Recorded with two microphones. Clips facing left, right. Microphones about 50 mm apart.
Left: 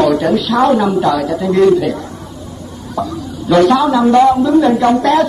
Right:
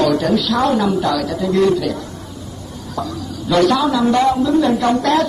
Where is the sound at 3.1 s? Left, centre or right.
Left.